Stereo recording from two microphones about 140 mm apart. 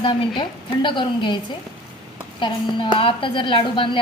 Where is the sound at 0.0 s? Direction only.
35° left (ahead or behind).